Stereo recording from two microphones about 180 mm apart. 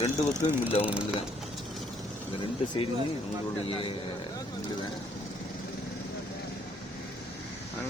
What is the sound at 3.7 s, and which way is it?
Speech, 30° left (ahead or behind).